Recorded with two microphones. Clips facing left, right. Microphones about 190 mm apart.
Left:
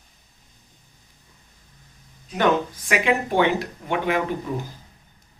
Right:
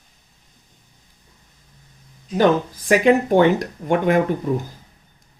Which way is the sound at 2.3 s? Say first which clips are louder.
Right 4 dB; 35° right (ahead or behind).